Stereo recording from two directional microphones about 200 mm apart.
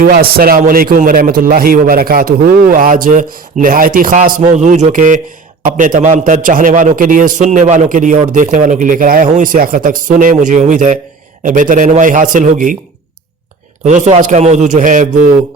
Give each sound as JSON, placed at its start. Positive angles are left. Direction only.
{"t": 0.0, "sound": "a man's voice", "side_deg": -45}
{"t": 13.8, "sound": "a man's voice", "side_deg": -35}